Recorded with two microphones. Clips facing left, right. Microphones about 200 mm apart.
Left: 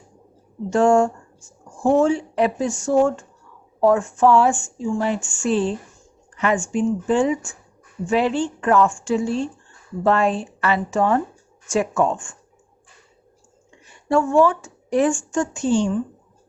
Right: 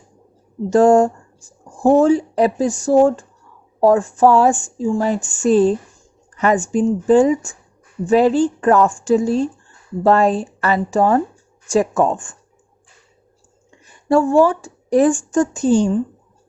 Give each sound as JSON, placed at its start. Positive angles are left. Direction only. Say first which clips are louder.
{"t": 0.7, "sound": "speech", "louder": "right 4 dB", "side_deg": -35}
{"t": 13.8, "sound": "speech", "louder": "right 4 dB", "side_deg": -35}